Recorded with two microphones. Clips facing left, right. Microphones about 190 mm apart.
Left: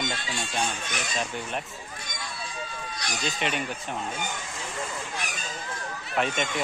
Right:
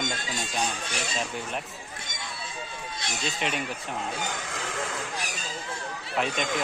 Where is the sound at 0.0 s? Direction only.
45° right (ahead or behind).